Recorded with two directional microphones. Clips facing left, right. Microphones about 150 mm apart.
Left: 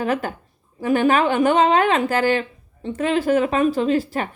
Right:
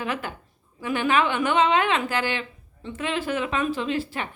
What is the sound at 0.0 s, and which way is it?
A woman's voice, 40° left (ahead or behind).